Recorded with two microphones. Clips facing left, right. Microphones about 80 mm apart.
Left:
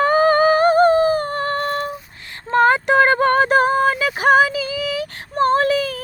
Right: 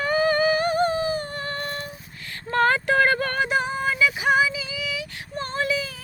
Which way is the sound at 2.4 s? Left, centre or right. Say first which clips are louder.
Left 6 dB; left.